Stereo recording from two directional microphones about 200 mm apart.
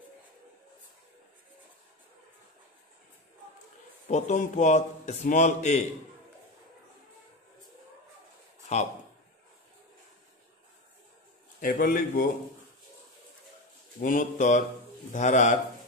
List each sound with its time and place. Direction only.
4.1 s a man's voice: 35° left (ahead or behind)
11.6 s a man's voice: 45° left (ahead or behind)
14.0 s a man's voice: 40° left (ahead or behind)